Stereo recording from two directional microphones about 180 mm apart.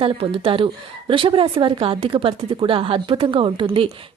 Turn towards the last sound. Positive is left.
turn(degrees=-30)  # may be behind; listen again after turning